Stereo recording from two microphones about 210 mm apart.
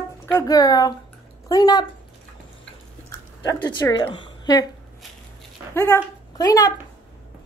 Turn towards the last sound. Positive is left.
turn(degrees=15)  # may be behind; listen again after turning